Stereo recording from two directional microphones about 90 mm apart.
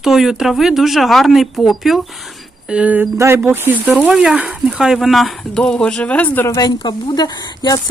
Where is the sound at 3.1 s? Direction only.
30° right (ahead or behind).